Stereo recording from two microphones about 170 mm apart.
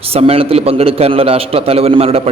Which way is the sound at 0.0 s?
35° right (ahead or behind).